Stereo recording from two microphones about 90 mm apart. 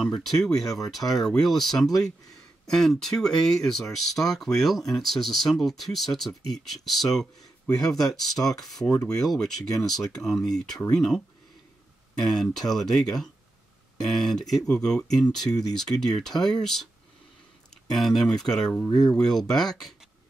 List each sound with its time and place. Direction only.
0.0 s speech: centre (ahead or behind)
1.9 s speech: 40° left (ahead or behind)
2.6 s speech: 5° left (ahead or behind)
17.9 s speech: centre (ahead or behind)